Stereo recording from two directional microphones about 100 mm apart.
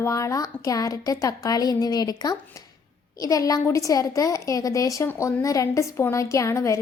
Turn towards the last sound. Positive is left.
turn(degrees=30)  # may be behind; listen again after turning